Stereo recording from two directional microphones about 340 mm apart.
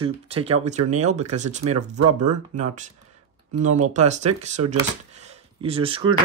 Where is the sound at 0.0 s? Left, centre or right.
Centre.